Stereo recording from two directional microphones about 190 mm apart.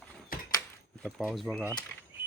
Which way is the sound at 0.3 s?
50° left (ahead or behind).